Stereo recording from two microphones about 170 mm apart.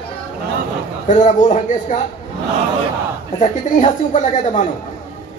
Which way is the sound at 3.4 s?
45° left (ahead or behind).